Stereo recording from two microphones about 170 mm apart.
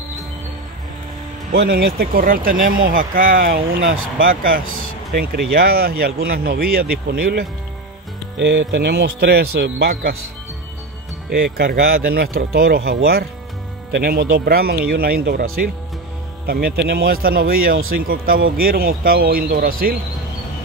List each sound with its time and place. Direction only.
1.5 s speech: 85° right; by 4.6 s 55° right (ahead or behind)
5.2 s speech: 65° right (ahead or behind)
8.4 s speech: 90° right; by 10.1 s 70° right (ahead or behind)
11.2 s speech: 70° right (ahead or behind)